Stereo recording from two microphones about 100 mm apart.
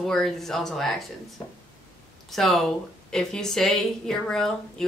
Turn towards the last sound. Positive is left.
turn(degrees=5)  # may be behind; listen again after turning